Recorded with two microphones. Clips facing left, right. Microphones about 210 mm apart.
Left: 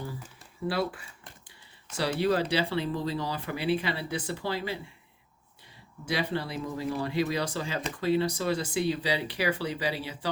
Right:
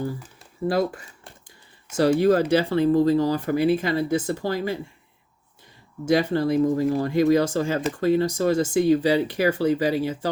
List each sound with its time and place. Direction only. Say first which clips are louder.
0.7 s speech: right 7 dB; 45° right (ahead or behind)
6.1 s speech: right 11 dB; 45° right (ahead or behind)